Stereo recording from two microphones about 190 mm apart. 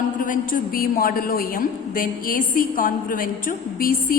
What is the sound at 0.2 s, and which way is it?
A woman's voice, 45° left (ahead or behind).